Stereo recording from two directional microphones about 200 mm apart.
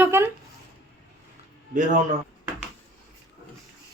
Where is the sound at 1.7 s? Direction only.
40° right (ahead or behind).